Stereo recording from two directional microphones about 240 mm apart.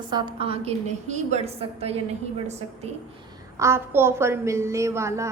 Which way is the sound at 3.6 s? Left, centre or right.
Centre.